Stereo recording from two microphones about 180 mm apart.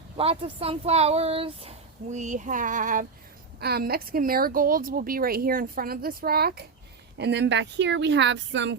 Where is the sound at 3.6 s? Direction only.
60° right (ahead or behind).